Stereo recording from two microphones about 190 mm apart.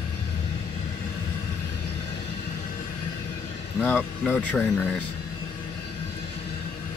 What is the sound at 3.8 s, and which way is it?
Speech, 10° left (ahead or behind).